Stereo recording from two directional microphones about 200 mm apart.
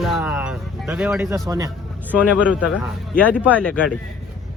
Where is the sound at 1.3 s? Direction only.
15° right (ahead or behind).